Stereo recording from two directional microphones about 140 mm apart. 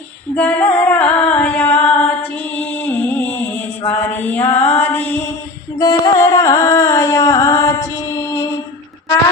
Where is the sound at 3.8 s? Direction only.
15° left (ahead or behind).